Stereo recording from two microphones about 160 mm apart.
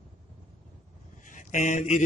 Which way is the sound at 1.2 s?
55° left (ahead or behind).